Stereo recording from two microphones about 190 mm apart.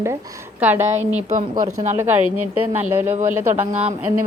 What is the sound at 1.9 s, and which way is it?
Speech, 15° right (ahead or behind).